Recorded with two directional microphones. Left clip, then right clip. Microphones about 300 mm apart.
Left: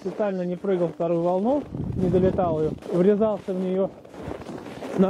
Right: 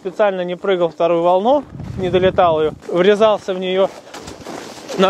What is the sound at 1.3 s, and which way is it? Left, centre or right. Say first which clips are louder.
Speech: right 11 dB; right.